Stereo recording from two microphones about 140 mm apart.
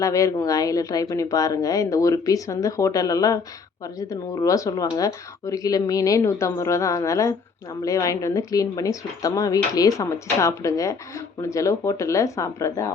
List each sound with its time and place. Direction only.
0.0 s speech: 25° left (ahead or behind)